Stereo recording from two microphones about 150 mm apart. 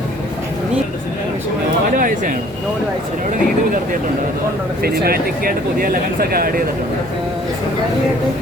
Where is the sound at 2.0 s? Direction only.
65° right (ahead or behind).